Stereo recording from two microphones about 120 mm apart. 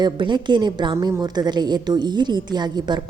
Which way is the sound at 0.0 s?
40° right (ahead or behind).